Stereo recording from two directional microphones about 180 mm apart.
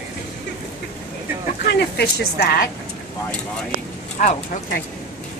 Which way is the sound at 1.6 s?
65° left (ahead or behind).